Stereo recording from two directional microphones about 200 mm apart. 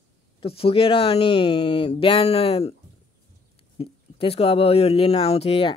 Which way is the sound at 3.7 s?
30° left (ahead or behind).